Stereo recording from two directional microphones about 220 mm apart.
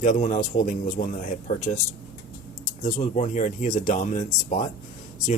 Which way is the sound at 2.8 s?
30° left (ahead or behind).